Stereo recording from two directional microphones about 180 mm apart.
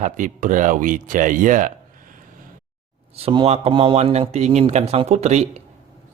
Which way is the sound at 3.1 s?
30° right (ahead or behind).